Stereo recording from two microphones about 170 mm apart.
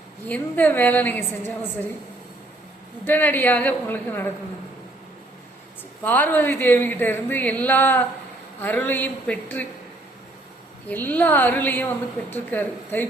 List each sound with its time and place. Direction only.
0.3 s a woman's voice: 10° left (ahead or behind)
3.0 s a woman's voice: 10° left (ahead or behind)
6.0 s a woman's voice: 10° left (ahead or behind)
10.8 s a woman's voice: 10° left (ahead or behind)